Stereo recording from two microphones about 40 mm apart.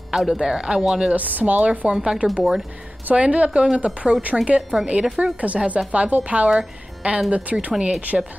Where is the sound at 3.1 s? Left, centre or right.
Right.